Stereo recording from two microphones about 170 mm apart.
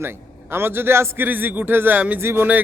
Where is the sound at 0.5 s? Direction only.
15° right (ahead or behind).